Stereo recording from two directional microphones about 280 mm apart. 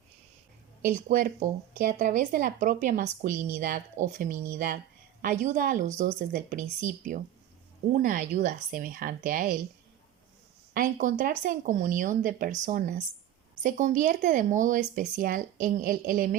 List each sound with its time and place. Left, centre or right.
0.9 s speech: right
10.8 s speech: right